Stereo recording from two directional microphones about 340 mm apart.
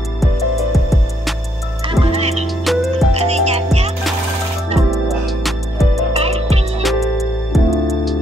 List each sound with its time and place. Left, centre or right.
1.9 s music: centre
2.6 s music: centre
3.1 s music: centre
4.9 s music: centre
6.1 s music: centre
6.8 s music: centre